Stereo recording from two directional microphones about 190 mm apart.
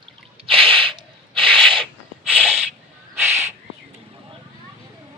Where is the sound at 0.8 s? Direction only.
25° right (ahead or behind).